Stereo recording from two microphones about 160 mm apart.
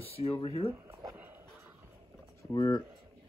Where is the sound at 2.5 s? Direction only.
20° left (ahead or behind).